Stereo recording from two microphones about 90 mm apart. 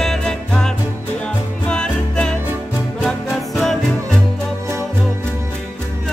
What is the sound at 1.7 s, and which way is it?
Music, 10° left (ahead or behind).